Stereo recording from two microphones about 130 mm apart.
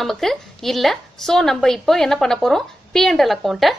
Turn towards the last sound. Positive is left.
turn(degrees=0)  # may be behind; listen again after turning